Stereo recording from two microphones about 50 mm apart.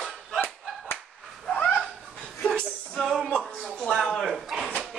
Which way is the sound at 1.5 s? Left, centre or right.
Left.